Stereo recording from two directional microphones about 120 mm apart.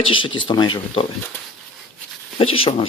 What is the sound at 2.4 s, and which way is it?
Speech, 50° left (ahead or behind).